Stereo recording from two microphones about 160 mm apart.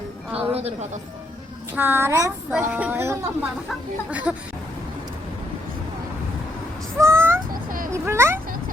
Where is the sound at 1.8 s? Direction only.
15° right (ahead or behind).